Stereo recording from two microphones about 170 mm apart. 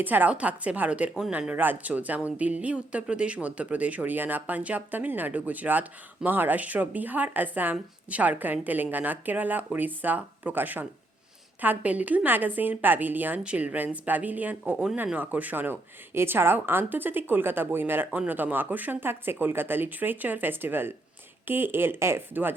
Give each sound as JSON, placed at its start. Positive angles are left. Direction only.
{"t": 0.0, "sound": "a woman's voice", "side_deg": -10}